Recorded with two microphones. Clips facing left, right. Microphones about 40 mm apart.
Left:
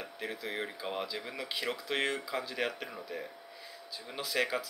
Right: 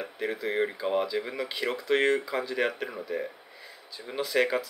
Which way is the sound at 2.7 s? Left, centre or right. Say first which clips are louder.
Right 7 dB; centre.